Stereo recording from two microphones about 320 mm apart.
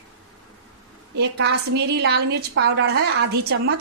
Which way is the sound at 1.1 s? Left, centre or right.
Right.